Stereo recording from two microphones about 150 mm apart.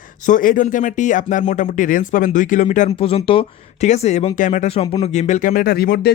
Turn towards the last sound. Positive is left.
turn(degrees=90)